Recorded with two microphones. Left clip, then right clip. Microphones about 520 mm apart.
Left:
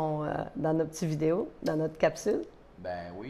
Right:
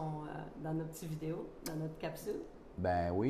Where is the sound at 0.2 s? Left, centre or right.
Left.